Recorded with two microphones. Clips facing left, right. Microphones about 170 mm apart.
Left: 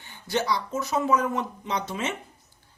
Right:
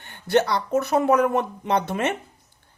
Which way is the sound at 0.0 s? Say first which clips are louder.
Right 7 dB; 60° right (ahead or behind).